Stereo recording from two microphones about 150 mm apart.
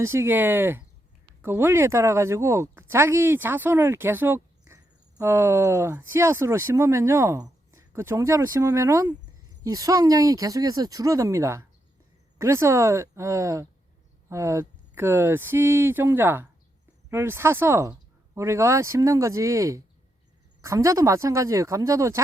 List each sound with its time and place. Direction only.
0.0 s speech: 15° right (ahead or behind)